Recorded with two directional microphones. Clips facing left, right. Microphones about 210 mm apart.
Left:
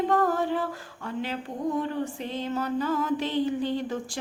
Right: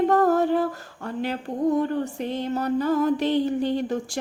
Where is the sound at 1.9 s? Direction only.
45° right (ahead or behind).